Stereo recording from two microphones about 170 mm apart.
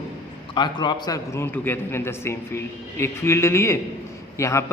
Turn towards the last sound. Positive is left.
turn(degrees=15)  # may be behind; listen again after turning